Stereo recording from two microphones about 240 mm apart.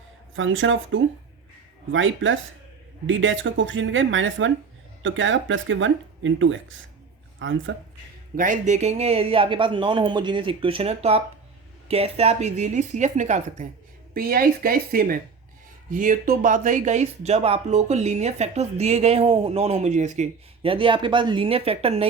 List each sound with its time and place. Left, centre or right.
0.3 s speech: right
8.4 s speech: right